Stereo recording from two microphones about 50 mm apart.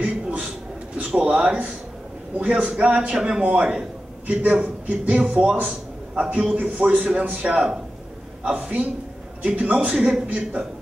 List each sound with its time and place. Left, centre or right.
0.0 s a sound: right
1.3 s a man's voice: right
6.5 s a man's voice: right
10.2 s a man's voice: right